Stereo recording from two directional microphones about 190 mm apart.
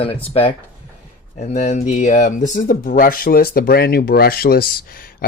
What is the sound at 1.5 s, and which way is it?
Speech, 40° left (ahead or behind).